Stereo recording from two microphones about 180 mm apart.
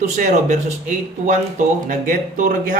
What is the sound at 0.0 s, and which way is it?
Speech, 45° right (ahead or behind).